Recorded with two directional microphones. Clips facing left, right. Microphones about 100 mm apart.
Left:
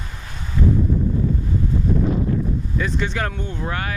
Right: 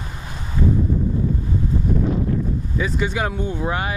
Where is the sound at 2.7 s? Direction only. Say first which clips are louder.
Right 2 dB; 5° right (ahead or behind).